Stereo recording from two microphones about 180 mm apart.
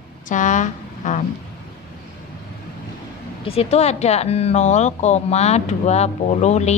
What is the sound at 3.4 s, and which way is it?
Speech, 35° left (ahead or behind).